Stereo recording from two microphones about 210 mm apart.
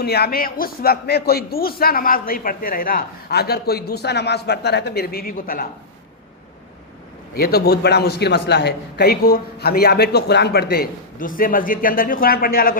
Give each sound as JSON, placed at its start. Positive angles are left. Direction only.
{"t": 0.0, "sound": "speech", "side_deg": 50}
{"t": 7.3, "sound": "speech", "side_deg": 45}